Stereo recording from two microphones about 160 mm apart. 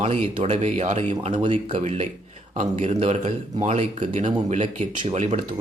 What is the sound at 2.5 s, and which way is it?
Speech, 45° right (ahead or behind).